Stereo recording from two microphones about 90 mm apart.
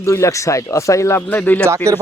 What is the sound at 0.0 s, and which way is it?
Speech, 35° left (ahead or behind).